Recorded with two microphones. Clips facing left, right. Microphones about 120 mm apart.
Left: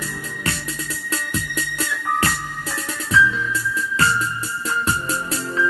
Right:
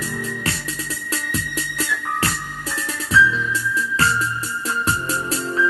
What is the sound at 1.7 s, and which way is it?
Music, 35° left (ahead or behind).